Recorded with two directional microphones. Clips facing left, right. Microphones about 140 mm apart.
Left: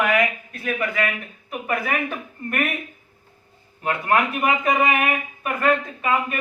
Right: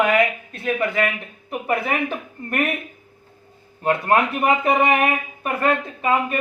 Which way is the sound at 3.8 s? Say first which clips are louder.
Right 3 dB; 30° right (ahead or behind).